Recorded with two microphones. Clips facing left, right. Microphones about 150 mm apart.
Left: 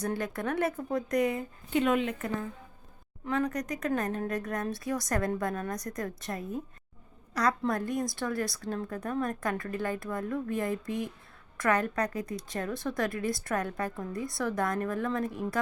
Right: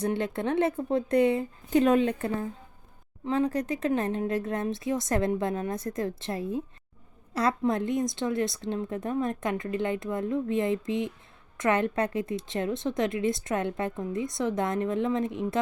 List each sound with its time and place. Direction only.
0.0 s a woman's voice: 25° right (ahead or behind)
7.6 s a woman's voice: 20° right (ahead or behind)